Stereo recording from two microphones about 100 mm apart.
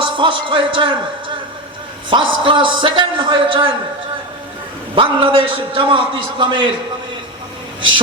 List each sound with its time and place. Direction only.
0.0 s speech: 55° right (ahead or behind)
2.0 s a man's voice: 55° right (ahead or behind)
4.9 s a man's voice: 55° right (ahead or behind)